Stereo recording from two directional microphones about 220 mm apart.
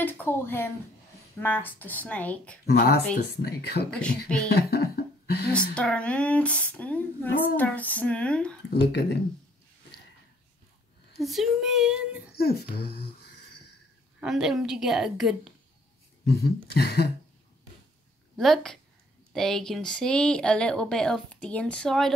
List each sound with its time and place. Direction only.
0.0 s speech: 10° left (ahead or behind)
2.6 s speech: 45° left (ahead or behind)
3.9 s speech: 5° left (ahead or behind)
4.5 s speech: 45° left (ahead or behind)
5.8 s speech: 5° left (ahead or behind)
8.6 s speech: 50° left (ahead or behind)
11.1 s speech: centre (ahead or behind)
12.4 s speech: 45° left (ahead or behind)
14.2 s speech: centre (ahead or behind)
16.7 s speech: 45° left (ahead or behind)
18.3 s a woman's voice: centre (ahead or behind)